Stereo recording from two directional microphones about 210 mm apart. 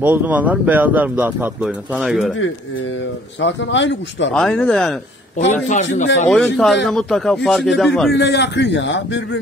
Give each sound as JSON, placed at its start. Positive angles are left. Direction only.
{"t": 0.0, "sound": "speech", "side_deg": -10}
{"t": 3.3, "sound": "a man's voice", "side_deg": 60}
{"t": 4.3, "sound": "speech", "side_deg": 5}
{"t": 5.4, "sound": "a man's voice", "side_deg": 35}
{"t": 6.3, "sound": "speech", "side_deg": 5}
{"t": 8.1, "sound": "a man's voice", "side_deg": 55}